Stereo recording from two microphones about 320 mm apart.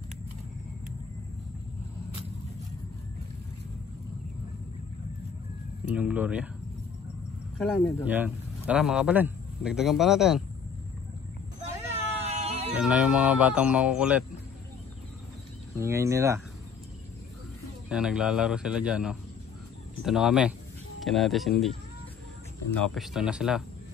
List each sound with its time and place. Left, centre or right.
5.9 s speech: centre
7.5 s speech: centre
11.9 s a sound: centre
12.7 s speech: centre
15.7 s speech: centre
17.8 s speech: centre
22.8 s speech: centre